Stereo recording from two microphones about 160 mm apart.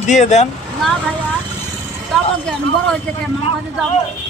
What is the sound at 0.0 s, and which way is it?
Speech, 45° left (ahead or behind).